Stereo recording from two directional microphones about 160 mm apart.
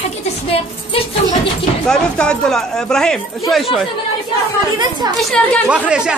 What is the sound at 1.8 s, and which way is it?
Speech, 5° left (ahead or behind).